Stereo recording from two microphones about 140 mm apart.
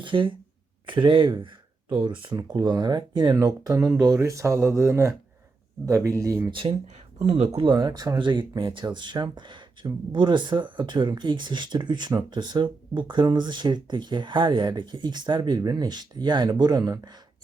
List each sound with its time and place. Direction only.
0.0 s speech: 35° right (ahead or behind)
6.5 s speech: 40° right (ahead or behind)
7.3 s speech: 50° right (ahead or behind); by 17.2 s 25° right (ahead or behind)